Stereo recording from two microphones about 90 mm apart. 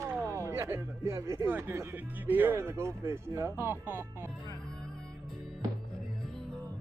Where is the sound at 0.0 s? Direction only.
30° right (ahead or behind).